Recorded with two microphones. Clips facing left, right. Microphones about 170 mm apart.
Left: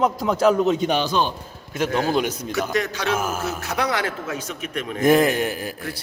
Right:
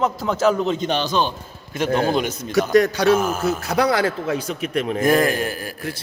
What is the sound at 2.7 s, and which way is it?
Speech, 40° right (ahead or behind).